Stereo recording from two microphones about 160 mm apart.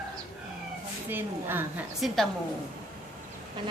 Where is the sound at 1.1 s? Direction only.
15° right (ahead or behind).